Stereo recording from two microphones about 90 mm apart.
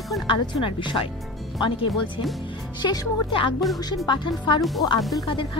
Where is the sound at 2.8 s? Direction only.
50° left (ahead or behind).